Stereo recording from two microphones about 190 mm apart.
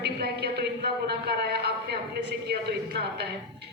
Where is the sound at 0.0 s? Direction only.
60° right (ahead or behind).